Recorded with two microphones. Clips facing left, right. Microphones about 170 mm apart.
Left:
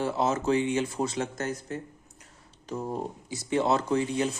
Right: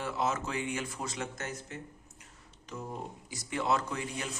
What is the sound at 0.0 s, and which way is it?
Speech, 30° left (ahead or behind).